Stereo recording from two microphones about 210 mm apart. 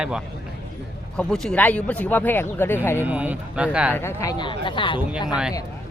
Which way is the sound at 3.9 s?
15° left (ahead or behind).